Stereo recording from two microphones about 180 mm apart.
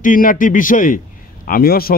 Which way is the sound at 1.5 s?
55° left (ahead or behind).